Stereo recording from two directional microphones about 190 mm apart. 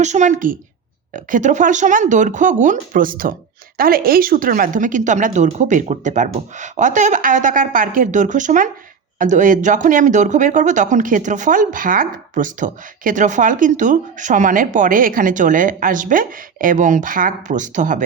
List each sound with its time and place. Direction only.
0.0 s speech: 40° right (ahead or behind)